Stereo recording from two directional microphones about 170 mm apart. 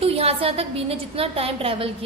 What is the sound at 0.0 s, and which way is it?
A woman's voice, 35° right (ahead or behind).